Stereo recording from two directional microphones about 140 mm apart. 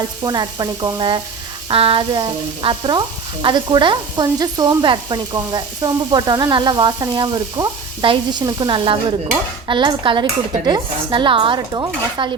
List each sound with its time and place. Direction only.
0.3 s sizzle: 30° right (ahead or behind)